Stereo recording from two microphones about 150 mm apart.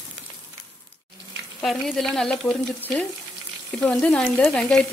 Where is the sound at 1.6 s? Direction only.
Centre (ahead or behind).